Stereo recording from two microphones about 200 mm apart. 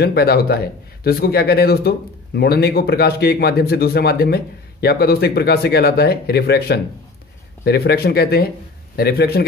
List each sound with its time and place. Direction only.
0.0 s speech: 50° left (ahead or behind)